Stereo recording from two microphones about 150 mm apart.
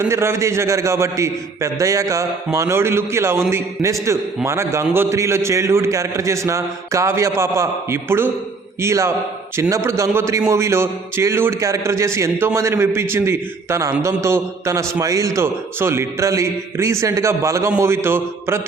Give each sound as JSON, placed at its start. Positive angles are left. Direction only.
{"t": 0.1, "sound": "a man's voice", "side_deg": -15}